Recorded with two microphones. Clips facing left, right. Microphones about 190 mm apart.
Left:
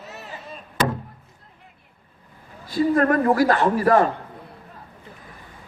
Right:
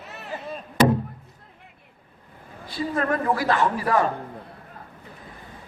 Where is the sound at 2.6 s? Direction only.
45° left (ahead or behind).